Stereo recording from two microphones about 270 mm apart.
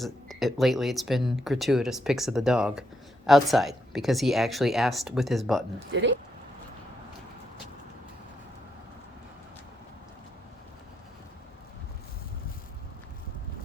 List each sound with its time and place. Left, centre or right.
0.0 s speech: centre
5.9 s speech: right